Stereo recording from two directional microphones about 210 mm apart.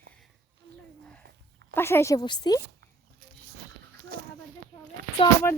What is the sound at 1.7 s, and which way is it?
Speech, 10° left (ahead or behind).